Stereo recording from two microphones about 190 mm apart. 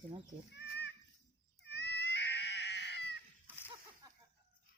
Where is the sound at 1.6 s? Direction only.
65° left (ahead or behind).